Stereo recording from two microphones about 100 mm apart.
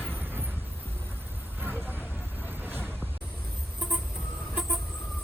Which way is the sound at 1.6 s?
20° right (ahead or behind).